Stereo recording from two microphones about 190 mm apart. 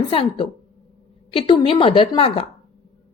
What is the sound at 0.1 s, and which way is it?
A woman's voice, 30° left (ahead or behind).